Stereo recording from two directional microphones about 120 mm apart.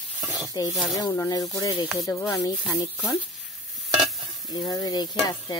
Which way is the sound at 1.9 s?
25° left (ahead or behind).